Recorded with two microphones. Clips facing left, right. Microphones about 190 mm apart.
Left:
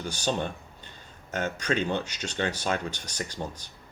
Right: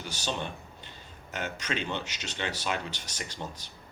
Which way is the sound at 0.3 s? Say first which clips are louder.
Left 5 dB; 50° left (ahead or behind).